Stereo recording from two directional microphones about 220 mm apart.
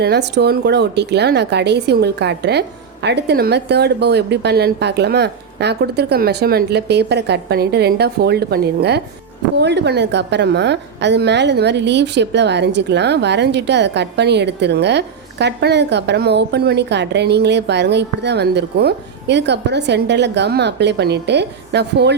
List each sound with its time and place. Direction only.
0.0 s a woman's voice: 50° right (ahead or behind)